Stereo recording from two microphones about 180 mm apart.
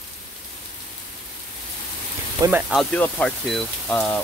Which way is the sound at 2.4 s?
20° right (ahead or behind).